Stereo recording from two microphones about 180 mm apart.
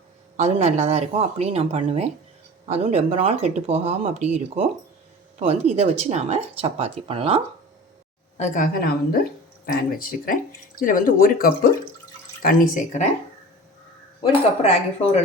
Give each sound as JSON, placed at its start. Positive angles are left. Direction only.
{"t": 0.3, "sound": "speech", "side_deg": -40}
{"t": 8.4, "sound": "speech", "side_deg": 45}
{"t": 14.2, "sound": "speech", "side_deg": 35}